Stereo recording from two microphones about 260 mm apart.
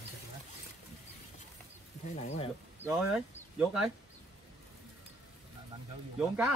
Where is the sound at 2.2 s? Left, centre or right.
Left.